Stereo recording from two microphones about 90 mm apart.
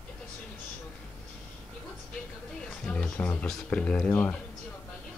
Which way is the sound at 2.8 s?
10° left (ahead or behind).